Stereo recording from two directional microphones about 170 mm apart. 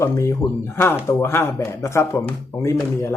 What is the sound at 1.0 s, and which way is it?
Speech, 15° left (ahead or behind).